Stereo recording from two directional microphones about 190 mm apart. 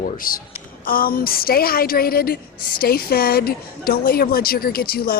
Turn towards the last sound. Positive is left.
turn(degrees=50)  # may be behind; listen again after turning